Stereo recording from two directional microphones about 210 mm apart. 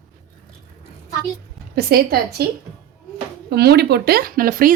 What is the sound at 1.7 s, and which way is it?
Speech, 45° right (ahead or behind).